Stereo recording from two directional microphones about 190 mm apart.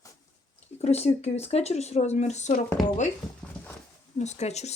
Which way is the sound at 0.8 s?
35° left (ahead or behind).